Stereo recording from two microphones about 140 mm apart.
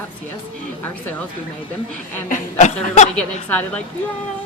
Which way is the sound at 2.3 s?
55° left (ahead or behind).